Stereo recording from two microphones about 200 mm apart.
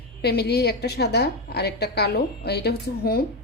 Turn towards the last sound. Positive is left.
turn(degrees=50)  # may be behind; listen again after turning